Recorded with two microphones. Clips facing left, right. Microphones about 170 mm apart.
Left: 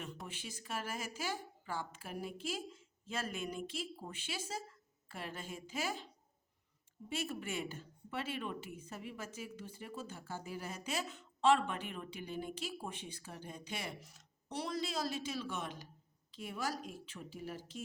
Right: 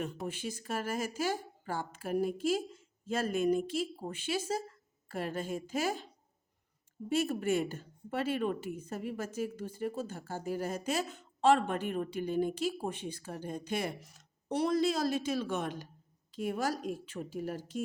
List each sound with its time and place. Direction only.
0.3 s a woman's voice: 45° right (ahead or behind)
7.1 s a woman's voice: 45° right (ahead or behind)